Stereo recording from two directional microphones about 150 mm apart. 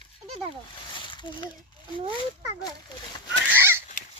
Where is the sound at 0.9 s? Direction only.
30° left (ahead or behind).